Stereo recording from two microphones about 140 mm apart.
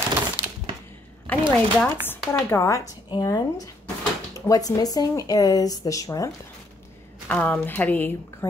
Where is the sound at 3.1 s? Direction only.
30° left (ahead or behind).